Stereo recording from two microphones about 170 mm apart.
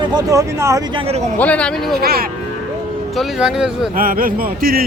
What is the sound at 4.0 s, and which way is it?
Speech, 55° right (ahead or behind).